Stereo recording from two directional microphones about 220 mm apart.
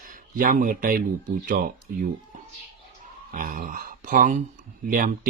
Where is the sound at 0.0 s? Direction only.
40° right (ahead or behind).